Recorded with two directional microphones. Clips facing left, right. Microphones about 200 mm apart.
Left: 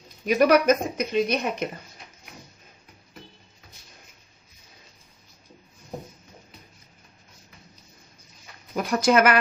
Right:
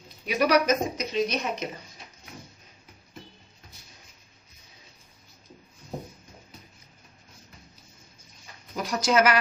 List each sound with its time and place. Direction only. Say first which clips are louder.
0.3 s a woman's voice: left 4 dB; 50° left (ahead or behind)
8.7 s speech: left 4 dB; 55° left (ahead or behind)